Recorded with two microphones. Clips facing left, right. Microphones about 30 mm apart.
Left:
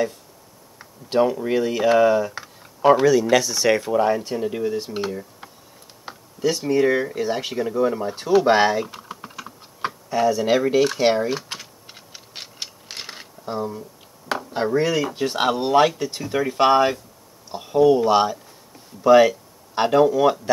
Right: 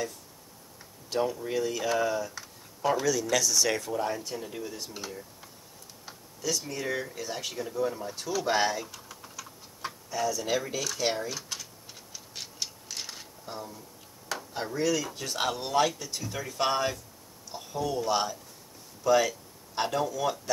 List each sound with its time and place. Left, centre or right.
0.7 s speech: left
12.8 s camera: left
14.3 s speech: left